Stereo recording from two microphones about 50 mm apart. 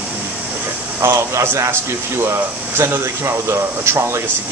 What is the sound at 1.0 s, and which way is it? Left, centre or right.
Speech, right.